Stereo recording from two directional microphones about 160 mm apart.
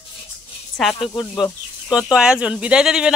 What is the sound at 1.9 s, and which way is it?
Speech, 5° right (ahead or behind).